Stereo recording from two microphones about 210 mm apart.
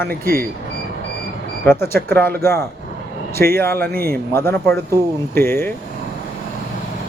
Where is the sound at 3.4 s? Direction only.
10° left (ahead or behind).